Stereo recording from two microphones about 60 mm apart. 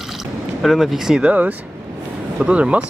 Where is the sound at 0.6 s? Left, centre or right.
Centre.